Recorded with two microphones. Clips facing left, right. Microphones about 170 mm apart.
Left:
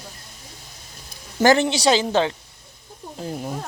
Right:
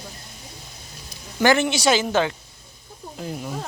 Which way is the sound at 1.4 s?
35° left (ahead or behind).